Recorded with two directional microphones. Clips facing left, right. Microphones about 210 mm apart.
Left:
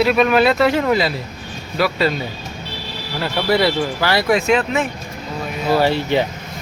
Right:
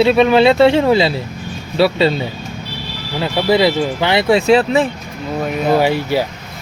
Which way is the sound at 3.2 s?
20° right (ahead or behind).